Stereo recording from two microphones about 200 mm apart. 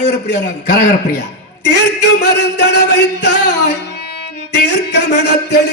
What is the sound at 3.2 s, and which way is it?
Music, 55° left (ahead or behind).